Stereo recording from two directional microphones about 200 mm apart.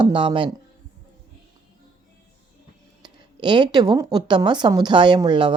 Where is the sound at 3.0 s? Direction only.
20° right (ahead or behind).